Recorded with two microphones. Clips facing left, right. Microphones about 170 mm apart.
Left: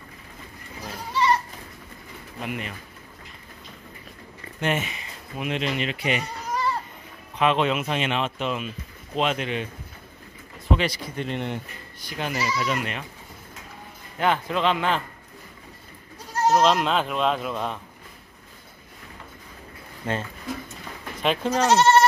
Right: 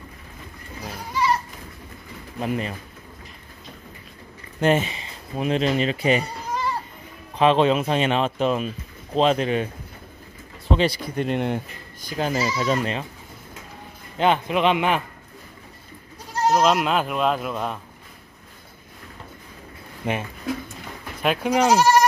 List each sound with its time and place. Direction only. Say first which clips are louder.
0.8 s goat: even; 5° right (ahead or behind)
2.4 s speech: right 6 dB; 35° right (ahead or behind)
4.6 s speech: right 6 dB; 35° right (ahead or behind)
10.7 s a sound: right 3 dB; 30° right (ahead or behind)
11.1 s speech: right 7 dB; 50° right (ahead or behind)
12.1 s speech: right 4 dB; 35° right (ahead or behind)
14.1 s a man's voice: right 3 dB; 20° right (ahead or behind)
16.4 s speech: right 1 dB; 5° right (ahead or behind)
20.1 s a man's voice: right 3 dB; 15° right (ahead or behind)